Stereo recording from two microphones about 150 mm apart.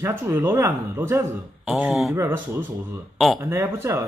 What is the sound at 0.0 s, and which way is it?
Speech, 15° right (ahead or behind).